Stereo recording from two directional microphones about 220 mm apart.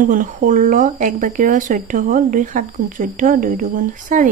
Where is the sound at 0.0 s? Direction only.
35° right (ahead or behind).